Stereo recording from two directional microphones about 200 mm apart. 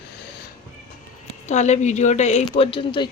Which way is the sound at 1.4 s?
35° left (ahead or behind).